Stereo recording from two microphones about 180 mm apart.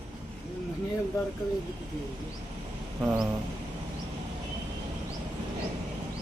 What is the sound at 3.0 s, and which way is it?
Speech, 5° right (ahead or behind).